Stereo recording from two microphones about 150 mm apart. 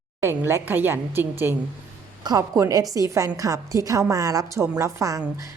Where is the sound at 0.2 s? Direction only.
15° right (ahead or behind).